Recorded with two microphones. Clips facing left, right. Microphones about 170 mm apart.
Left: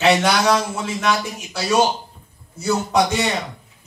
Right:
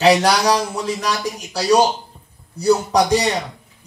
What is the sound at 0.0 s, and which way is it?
A man's voice, 35° right (ahead or behind).